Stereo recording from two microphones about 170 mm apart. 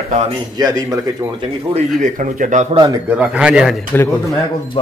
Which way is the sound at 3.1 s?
10° right (ahead or behind).